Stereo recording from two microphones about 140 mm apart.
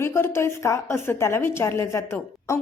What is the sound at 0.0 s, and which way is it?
A woman's voice, 20° left (ahead or behind).